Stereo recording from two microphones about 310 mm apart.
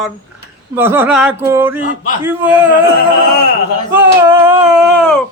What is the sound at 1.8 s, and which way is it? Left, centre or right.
Speech, left.